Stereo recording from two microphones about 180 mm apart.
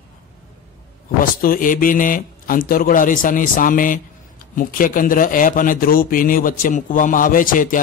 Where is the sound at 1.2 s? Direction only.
50° left (ahead or behind).